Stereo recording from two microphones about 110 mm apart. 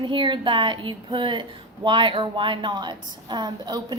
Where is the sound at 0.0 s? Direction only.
50° right (ahead or behind).